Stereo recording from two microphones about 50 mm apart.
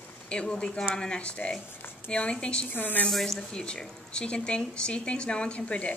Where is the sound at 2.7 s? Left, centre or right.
Left.